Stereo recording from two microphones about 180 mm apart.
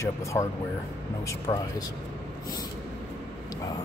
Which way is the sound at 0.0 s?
15° left (ahead or behind).